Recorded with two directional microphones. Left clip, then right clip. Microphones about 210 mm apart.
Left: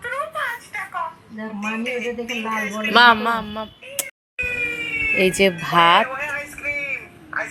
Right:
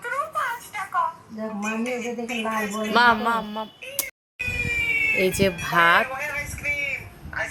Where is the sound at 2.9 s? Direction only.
10° left (ahead or behind).